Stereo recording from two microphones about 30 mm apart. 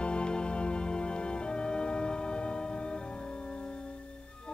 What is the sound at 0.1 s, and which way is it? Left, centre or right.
Music, left.